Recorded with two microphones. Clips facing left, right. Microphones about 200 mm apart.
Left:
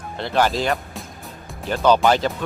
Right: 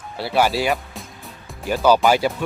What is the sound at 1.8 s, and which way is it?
Speech, 5° right (ahead or behind).